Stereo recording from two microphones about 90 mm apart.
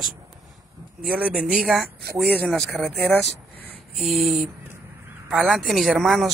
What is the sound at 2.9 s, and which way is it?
Speech, 20° left (ahead or behind).